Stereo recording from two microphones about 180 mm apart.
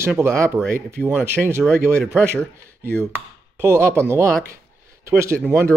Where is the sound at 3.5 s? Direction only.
15° right (ahead or behind).